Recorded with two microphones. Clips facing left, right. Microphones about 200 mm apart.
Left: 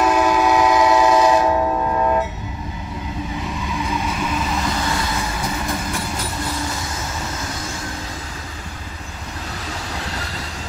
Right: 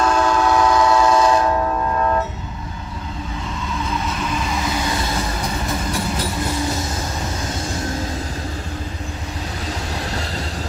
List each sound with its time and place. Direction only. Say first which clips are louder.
0.0 s train: left 1 dB; 15° left (ahead or behind)
3.6 s vehicle: even; 10° left (ahead or behind)